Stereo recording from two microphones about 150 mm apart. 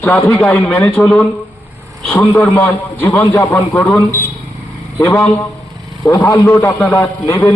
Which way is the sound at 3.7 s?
5° left (ahead or behind).